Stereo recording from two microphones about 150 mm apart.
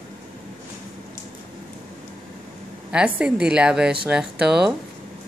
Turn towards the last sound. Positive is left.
turn(degrees=-5)  # may be behind; listen again after turning